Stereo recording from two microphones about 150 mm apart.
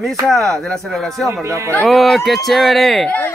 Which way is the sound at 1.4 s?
20° right (ahead or behind).